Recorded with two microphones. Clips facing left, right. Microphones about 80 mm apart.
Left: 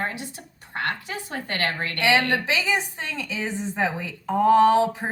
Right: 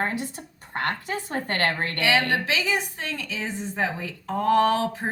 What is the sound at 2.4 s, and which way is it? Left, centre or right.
A woman's voice, left.